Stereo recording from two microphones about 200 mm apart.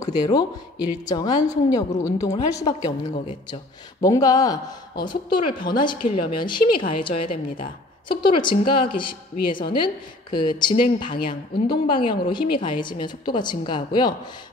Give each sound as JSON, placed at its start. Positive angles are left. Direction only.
{"t": 0.0, "sound": "a woman's voice", "side_deg": 20}